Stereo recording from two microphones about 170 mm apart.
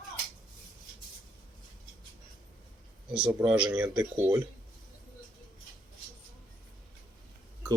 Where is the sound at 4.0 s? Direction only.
25° right (ahead or behind).